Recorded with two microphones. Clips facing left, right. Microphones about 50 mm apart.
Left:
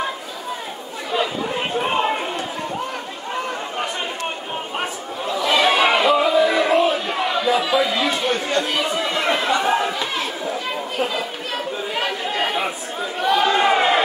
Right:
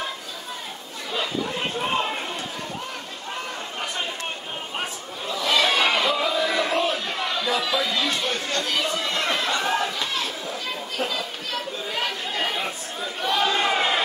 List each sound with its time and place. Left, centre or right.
1.1 s chatter: centre
4.7 s chatter: centre
11.0 s chatter: centre
13.2 s a sound: centre